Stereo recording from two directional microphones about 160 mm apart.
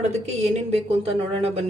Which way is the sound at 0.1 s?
40° right (ahead or behind).